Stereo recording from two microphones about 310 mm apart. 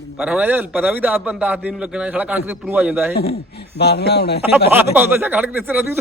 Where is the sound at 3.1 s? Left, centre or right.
Left.